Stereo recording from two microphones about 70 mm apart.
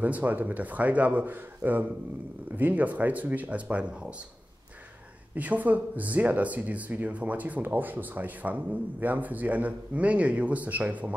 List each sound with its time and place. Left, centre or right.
0.0 s speech: right
5.3 s speech: right